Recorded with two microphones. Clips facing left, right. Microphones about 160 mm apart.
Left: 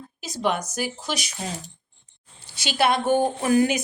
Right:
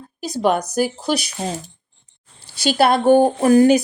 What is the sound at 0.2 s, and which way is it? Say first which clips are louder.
Speech: right 7 dB; 40° right (ahead or behind).